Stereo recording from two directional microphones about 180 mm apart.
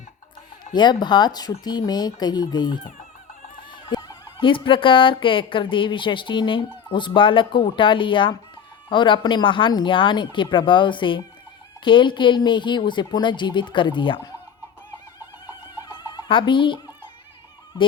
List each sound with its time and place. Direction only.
0.6 s speech: 25° left (ahead or behind)
15.8 s fowl: 25° left (ahead or behind)